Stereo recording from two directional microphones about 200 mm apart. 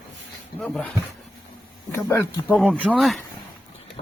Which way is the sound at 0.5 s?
Centre (ahead or behind).